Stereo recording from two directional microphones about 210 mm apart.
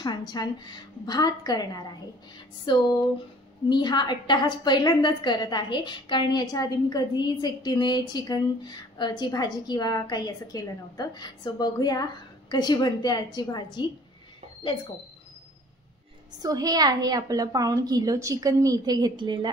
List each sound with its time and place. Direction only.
0.0 s a woman's voice: 20° left (ahead or behind)
16.4 s a woman's voice: 15° right (ahead or behind)